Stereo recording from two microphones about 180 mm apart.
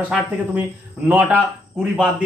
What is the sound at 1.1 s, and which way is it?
Speech, 10° right (ahead or behind).